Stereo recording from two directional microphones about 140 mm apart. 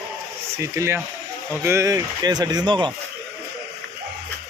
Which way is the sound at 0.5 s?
20° right (ahead or behind).